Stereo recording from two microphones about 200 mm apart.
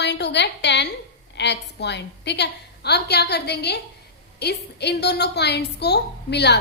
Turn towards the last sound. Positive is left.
turn(degrees=55)  # may be behind; listen again after turning